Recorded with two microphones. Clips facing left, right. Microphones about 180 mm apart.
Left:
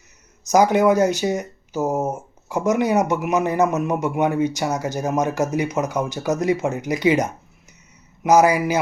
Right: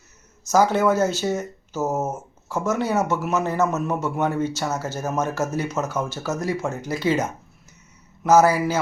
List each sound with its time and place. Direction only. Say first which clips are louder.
0.4 s speech: left 3 dB; 15° left (ahead or behind)